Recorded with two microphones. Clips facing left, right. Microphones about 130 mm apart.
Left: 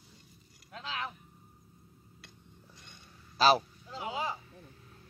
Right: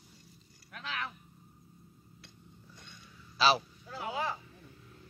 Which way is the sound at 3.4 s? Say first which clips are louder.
Left 3 dB; 40° left (ahead or behind).